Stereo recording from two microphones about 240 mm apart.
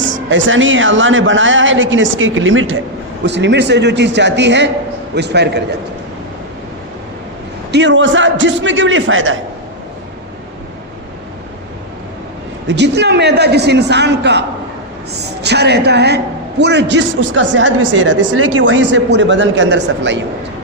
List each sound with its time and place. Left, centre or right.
0.0 s a man's voice: right
7.7 s a man's voice: right
12.6 s a man's voice: right